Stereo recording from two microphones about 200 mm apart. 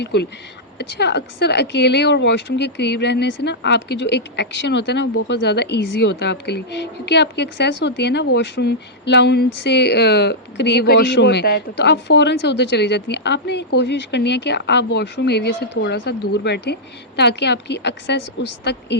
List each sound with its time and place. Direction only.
0.0 s speech: 55° left (ahead or behind)